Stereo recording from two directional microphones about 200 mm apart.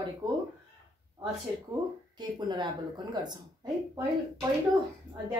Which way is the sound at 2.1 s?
20° right (ahead or behind).